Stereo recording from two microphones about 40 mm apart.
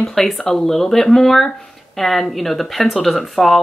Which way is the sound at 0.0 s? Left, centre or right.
Centre.